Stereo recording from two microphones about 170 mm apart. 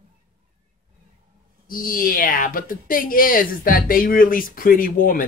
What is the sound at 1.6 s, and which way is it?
Speech, 55° left (ahead or behind).